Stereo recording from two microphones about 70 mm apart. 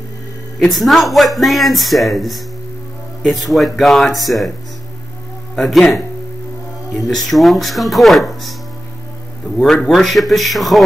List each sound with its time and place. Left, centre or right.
0.6 s speech: centre
3.4 s speech: centre
5.6 s speech: centre
7.0 s speech: centre
9.6 s speech: centre